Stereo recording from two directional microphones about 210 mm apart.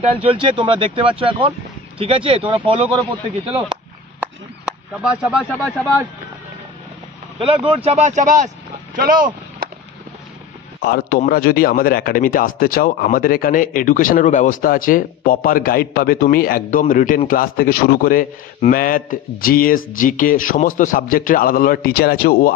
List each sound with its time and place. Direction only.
0.2 s speech: 25° right (ahead or behind)
4.2 s a sound: 5° right (ahead or behind)
7.3 s speech: 25° right (ahead or behind); by 9.3 s 40° right (ahead or behind)
10.8 s a man's voice: 45° left (ahead or behind)